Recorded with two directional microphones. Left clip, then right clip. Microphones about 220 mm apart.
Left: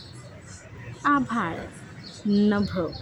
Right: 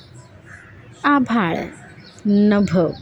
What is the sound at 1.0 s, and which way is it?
A woman's voice, 20° right (ahead or behind).